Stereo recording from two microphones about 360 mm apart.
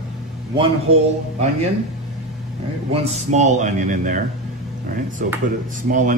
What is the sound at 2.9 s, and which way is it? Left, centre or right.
A man's voice, centre.